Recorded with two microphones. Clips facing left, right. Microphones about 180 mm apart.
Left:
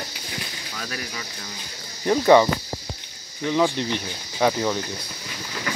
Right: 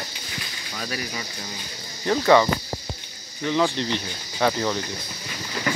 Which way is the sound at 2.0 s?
15° left (ahead or behind).